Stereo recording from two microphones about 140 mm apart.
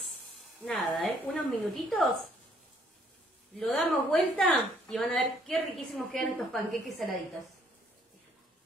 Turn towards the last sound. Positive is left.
turn(degrees=0)  # may be behind; listen again after turning